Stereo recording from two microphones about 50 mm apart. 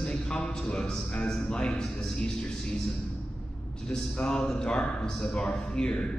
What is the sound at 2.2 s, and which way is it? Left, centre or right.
Music, centre.